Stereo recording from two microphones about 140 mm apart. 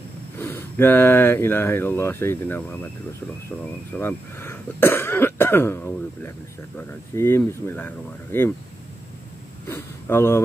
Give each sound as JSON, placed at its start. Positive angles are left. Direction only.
{"t": 0.4, "sound": "speech", "side_deg": 15}
{"t": 4.0, "sound": "speech", "side_deg": 15}
{"t": 9.7, "sound": "speech", "side_deg": 15}